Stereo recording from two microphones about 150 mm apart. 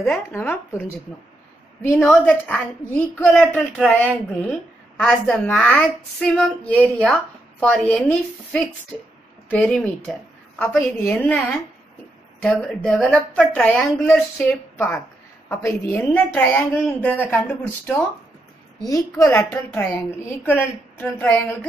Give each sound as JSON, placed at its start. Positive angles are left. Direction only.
{"t": 0.0, "sound": "a woman's voice", "side_deg": 10}
{"t": 18.8, "sound": "a woman's voice", "side_deg": 25}